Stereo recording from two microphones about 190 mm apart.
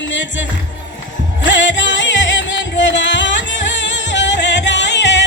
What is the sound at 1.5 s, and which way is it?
Music, 70° left (ahead or behind).